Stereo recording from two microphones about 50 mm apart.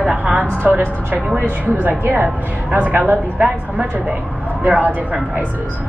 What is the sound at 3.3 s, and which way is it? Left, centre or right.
Speech, right.